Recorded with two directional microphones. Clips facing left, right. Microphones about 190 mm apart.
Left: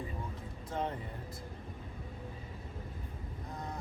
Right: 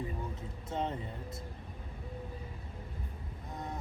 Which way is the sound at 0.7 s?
25° right (ahead or behind).